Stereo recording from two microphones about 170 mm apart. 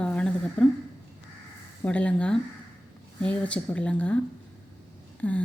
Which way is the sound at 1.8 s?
5° left (ahead or behind).